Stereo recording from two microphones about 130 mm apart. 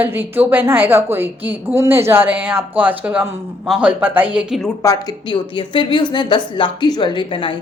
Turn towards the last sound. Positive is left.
turn(degrees=40)  # may be behind; listen again after turning